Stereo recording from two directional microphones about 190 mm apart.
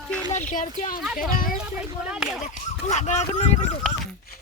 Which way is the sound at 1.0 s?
Centre (ahead or behind).